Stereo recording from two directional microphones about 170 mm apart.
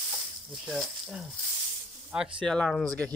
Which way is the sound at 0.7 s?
Centre (ahead or behind).